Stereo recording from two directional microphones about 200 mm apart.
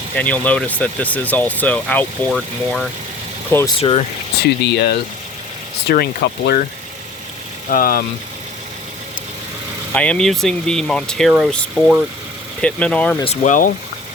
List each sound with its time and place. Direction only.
0.2 s speech: 5° left (ahead or behind)
3.8 s speech: 30° left (ahead or behind)
4.4 s speech: 55° left (ahead or behind)
7.7 s speech: 45° left (ahead or behind)
9.9 s speech: 5° left (ahead or behind)
13.2 s speech: 35° left (ahead or behind)